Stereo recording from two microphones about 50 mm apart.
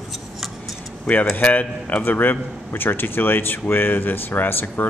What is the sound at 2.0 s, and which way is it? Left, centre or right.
Speech, left.